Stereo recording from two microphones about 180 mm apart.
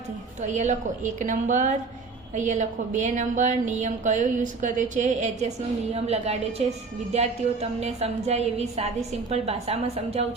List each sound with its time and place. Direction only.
0.4 s a woman's voice: 40° right (ahead or behind)